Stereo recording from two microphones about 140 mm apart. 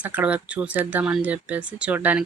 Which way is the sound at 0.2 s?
10° right (ahead or behind).